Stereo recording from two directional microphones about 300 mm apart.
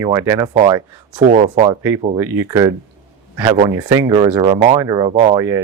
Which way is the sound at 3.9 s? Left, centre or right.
Centre.